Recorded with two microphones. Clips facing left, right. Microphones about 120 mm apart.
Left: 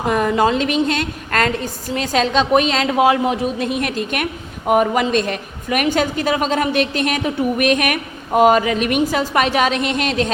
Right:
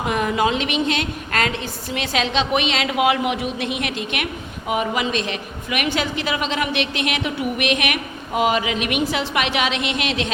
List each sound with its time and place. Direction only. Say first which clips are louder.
0.0 s a woman's voice: left 4 dB; 40° left (ahead or behind)